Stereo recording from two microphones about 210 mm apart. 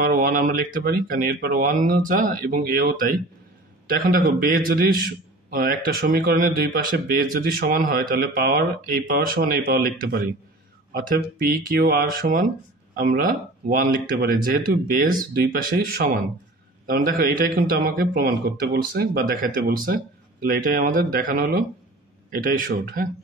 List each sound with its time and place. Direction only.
0.0 s speech: 40° right (ahead or behind)